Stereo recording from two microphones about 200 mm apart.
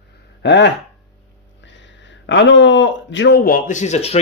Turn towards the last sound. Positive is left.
turn(degrees=35)  # may be behind; listen again after turning